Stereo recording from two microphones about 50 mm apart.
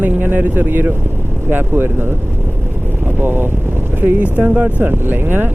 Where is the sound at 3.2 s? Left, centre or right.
Right.